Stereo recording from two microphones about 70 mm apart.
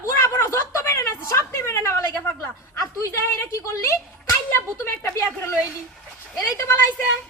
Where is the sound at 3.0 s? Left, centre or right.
Left.